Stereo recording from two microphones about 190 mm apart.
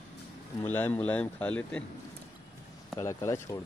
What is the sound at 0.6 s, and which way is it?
Speech, 10° left (ahead or behind).